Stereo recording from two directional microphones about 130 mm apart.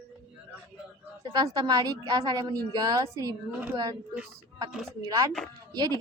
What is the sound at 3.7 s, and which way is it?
Speech, 30° right (ahead or behind).